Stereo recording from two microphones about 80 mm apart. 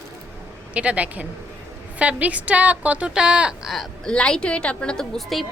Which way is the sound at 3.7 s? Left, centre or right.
Centre.